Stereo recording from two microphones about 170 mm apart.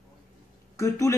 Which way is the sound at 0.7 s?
20° left (ahead or behind).